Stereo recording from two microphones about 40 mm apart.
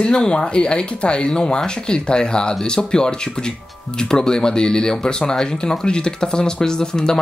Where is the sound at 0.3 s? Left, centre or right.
Left.